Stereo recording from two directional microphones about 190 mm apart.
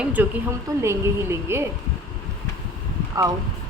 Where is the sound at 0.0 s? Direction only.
10° right (ahead or behind).